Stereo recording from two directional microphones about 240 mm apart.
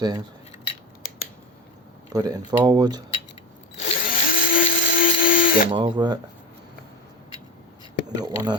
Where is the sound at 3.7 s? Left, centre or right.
Left.